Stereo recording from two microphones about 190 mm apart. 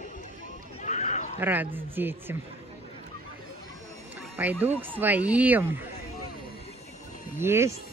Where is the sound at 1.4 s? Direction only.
10° right (ahead or behind).